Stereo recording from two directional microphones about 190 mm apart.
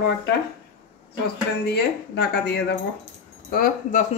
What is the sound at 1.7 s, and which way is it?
Speech, 60° left (ahead or behind).